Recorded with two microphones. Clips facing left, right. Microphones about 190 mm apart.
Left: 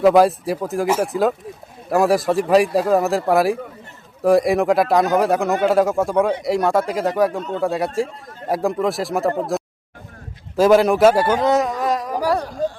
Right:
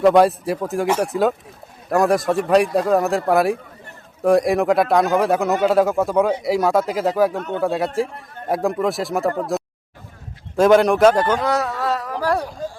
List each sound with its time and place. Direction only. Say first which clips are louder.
0.0 s a man's voice: even; centre (ahead or behind)
7.3 s speech: even; 65° right (ahead or behind)
7.6 s a man's voice: even; centre (ahead or behind)
8.0 s speech: even; 60° right (ahead or behind)
8.4 s a man's voice: even; centre (ahead or behind)
9.5 s a sound: even; centre (ahead or behind)
10.6 s a man's voice: even; centre (ahead or behind)
11.3 s a sound: left 3 dB; 20° left (ahead or behind)